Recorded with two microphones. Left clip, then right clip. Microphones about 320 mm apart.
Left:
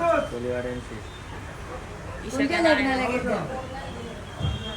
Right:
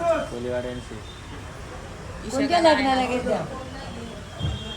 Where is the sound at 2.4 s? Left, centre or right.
Right.